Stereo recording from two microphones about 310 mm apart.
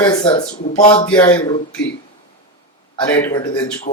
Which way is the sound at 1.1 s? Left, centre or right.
Centre.